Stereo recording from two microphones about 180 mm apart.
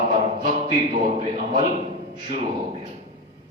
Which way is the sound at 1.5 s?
45° right (ahead or behind).